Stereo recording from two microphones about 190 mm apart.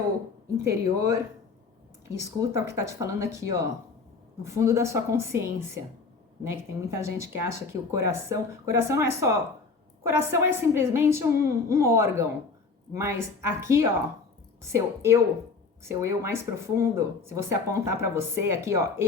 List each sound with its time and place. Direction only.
0.6 s speech: 15° right (ahead or behind)
4.5 s speech: 15° right (ahead or behind)